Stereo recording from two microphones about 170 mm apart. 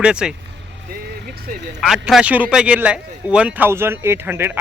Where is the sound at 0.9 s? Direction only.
65° right (ahead or behind).